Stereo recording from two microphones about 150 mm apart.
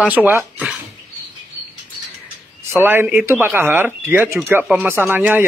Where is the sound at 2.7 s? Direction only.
15° right (ahead or behind).